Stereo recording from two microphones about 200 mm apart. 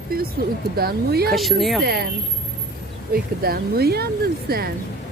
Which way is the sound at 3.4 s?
50° right (ahead or behind).